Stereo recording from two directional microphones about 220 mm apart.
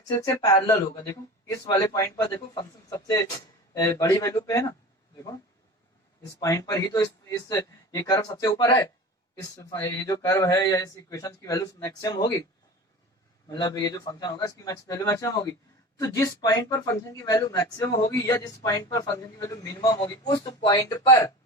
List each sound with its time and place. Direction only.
0.2 s speech: 15° left (ahead or behind)
3.8 s speech: 15° left (ahead or behind)
6.4 s speech: 15° left (ahead or behind)
13.5 s speech: 20° left (ahead or behind)